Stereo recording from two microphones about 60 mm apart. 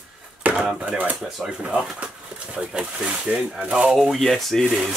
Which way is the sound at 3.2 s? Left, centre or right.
Centre.